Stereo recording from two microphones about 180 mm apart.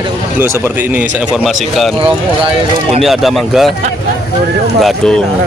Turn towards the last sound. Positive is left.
turn(degrees=0)  # may be behind; listen again after turning